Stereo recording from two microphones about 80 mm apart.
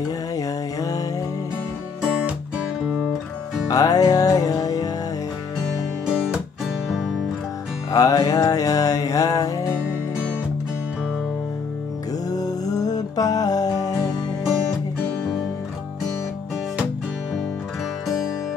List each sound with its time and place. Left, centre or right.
0.4 s music: left
2.0 s music: centre
3.6 s music: left
6.0 s music: centre
6.9 s music: centre
7.9 s music: left
12.3 s music: left